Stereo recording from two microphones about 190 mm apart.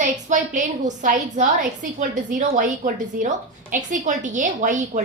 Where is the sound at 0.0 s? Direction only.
40° right (ahead or behind).